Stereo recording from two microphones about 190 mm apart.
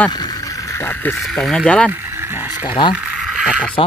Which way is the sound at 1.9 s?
10° right (ahead or behind).